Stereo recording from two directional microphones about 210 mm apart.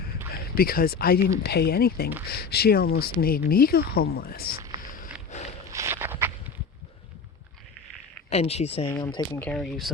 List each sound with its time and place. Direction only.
0.3 s speech: 45° left (ahead or behind)
5.3 s walk: 35° left (ahead or behind)
5.7 s walk: 10° right (ahead or behind)
8.3 s speech: 30° left (ahead or behind)
8.9 s speech: 20° left (ahead or behind); by 9.9 s centre (ahead or behind)